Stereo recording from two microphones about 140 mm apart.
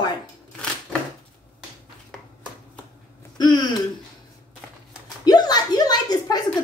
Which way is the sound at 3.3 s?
30° left (ahead or behind).